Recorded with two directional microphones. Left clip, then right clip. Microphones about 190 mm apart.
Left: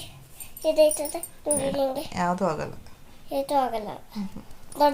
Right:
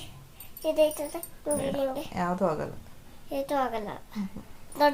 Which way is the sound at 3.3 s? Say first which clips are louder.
Left 4 dB; 15° right (ahead or behind).